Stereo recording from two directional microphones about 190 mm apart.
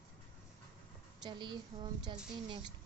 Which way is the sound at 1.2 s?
25° right (ahead or behind).